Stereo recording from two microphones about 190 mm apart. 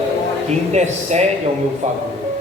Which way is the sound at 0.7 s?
35° right (ahead or behind).